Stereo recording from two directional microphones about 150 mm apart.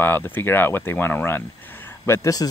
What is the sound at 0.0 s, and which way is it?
Speech, 15° left (ahead or behind).